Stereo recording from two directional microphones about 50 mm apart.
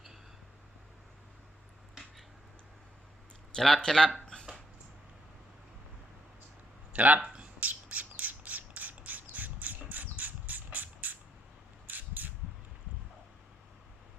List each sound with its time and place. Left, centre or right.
3.5 s speech: centre
6.9 s speech: right
7.6 s squawk: right
11.9 s a sound: right